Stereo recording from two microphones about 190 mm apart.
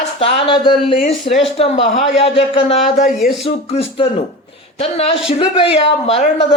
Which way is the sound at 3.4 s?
30° left (ahead or behind).